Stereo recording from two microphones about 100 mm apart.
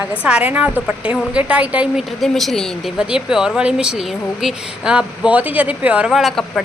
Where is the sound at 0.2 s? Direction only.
10° right (ahead or behind).